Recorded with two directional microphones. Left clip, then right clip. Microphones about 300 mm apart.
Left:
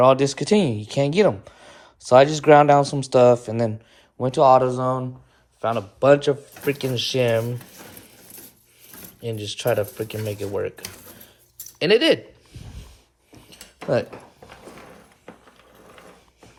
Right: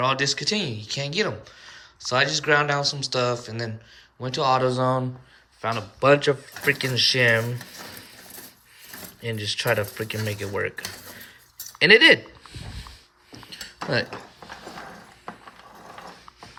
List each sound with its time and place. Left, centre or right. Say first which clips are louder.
0.0 s speech: left 6 dB; centre
5.6 s dishes: left 3 dB; centre
9.2 s dishes: left 1 dB; centre
11.8 s a sound: right 3 dB; centre